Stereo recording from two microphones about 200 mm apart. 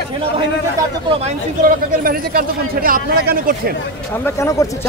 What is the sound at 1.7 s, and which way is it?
Speech, 45° right (ahead or behind).